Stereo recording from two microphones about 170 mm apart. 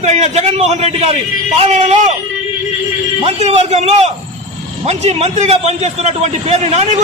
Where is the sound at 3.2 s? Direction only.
40° right (ahead or behind).